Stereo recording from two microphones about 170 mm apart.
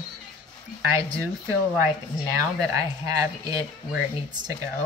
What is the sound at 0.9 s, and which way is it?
A woman's voice, 15° right (ahead or behind).